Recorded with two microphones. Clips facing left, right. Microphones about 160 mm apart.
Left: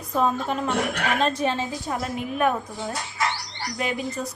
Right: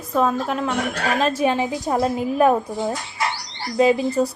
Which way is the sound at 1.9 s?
30° right (ahead or behind).